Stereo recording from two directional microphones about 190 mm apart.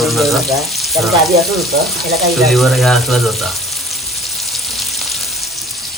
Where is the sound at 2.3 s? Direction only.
Centre (ahead or behind).